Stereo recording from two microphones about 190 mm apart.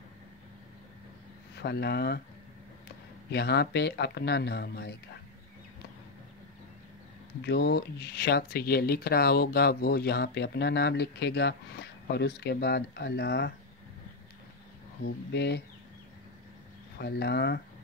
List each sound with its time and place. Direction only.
1.6 s speech: 60° left (ahead or behind)
3.3 s speech: 60° left (ahead or behind)
7.4 s speech: 60° left (ahead or behind)
15.0 s speech: 60° left (ahead or behind)
17.0 s speech: 60° left (ahead or behind)